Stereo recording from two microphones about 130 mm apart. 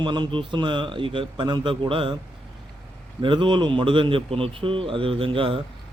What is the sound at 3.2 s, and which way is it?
A man's voice, 40° right (ahead or behind).